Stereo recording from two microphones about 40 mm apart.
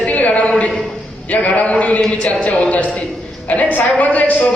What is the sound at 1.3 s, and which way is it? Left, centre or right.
A woman's voice, left.